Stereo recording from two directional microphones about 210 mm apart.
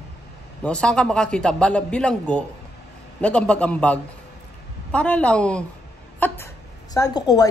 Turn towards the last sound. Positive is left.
turn(degrees=20)  # may be behind; listen again after turning